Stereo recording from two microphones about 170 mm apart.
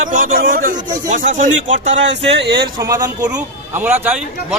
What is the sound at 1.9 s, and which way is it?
Speech, 90° right.